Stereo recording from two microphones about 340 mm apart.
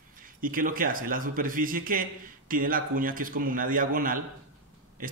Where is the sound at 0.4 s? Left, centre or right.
Right.